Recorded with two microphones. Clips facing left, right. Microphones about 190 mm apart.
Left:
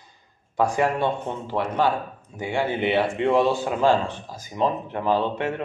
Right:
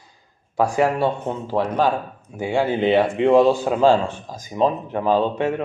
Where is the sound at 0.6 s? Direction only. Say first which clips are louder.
Right 3 dB; 10° right (ahead or behind).